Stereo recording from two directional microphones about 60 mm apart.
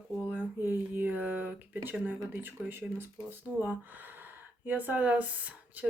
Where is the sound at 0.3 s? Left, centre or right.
Right.